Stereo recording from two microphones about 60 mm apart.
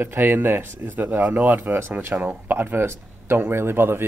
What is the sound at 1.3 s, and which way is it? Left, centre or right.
Speech, centre.